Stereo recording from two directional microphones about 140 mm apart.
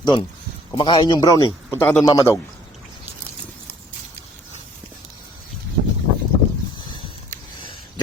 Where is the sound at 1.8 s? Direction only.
15° left (ahead or behind).